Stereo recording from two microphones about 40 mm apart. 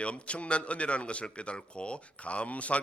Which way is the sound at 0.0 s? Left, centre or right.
Left.